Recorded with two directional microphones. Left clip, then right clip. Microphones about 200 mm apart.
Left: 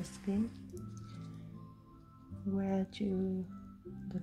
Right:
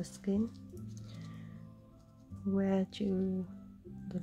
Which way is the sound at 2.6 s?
30° right (ahead or behind).